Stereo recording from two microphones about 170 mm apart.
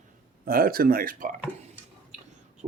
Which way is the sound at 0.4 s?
60° right (ahead or behind).